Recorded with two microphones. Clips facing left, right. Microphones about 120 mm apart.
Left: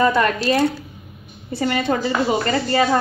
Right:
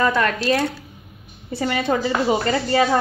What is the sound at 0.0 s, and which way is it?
Speech, 10° left (ahead or behind).